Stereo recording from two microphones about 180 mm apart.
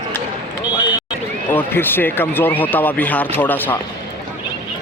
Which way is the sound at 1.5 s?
10° left (ahead or behind).